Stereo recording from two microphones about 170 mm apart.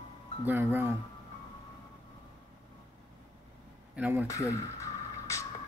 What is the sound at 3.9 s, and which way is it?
Speech, 10° right (ahead or behind).